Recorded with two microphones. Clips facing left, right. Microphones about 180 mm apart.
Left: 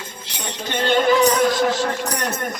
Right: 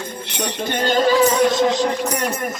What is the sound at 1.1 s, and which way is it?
Speech, centre (ahead or behind).